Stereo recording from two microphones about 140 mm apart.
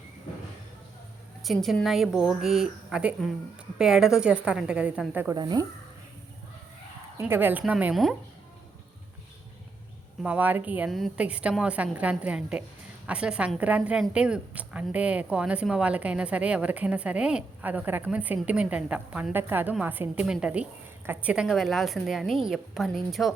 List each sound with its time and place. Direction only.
1.5 s a woman's voice: centre (ahead or behind)
5.3 s speech: 30° right (ahead or behind)
7.2 s a woman's voice: 15° right (ahead or behind)
10.2 s a woman's voice: 10° right (ahead or behind)